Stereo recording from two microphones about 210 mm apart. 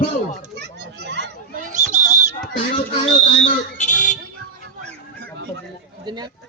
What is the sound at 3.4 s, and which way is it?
Speech, 35° left (ahead or behind).